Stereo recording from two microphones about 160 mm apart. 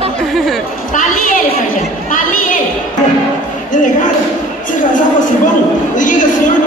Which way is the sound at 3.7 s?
55° left (ahead or behind).